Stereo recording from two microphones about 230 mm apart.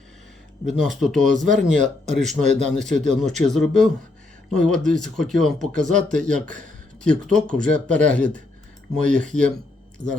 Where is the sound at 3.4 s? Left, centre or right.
Centre.